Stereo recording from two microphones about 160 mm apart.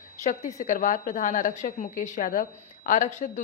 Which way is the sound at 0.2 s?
50° left (ahead or behind).